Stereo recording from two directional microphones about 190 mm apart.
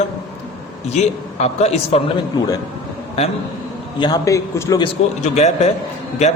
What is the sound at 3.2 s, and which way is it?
Speech, 35° left (ahead or behind).